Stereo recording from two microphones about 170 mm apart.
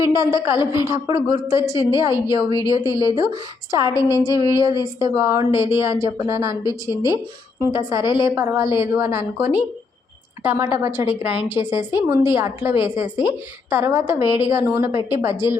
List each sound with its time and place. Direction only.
0.0 s a woman's voice: 15° right (ahead or behind)